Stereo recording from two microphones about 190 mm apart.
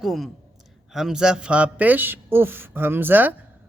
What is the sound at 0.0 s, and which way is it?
A man's voice, centre (ahead or behind).